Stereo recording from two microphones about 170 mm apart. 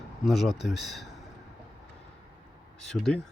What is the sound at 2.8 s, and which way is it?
Speech, centre (ahead or behind).